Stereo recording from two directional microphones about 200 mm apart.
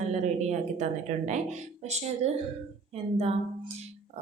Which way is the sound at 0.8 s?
35° right (ahead or behind).